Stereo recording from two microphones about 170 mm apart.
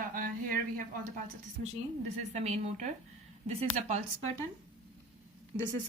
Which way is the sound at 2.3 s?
40° right (ahead or behind).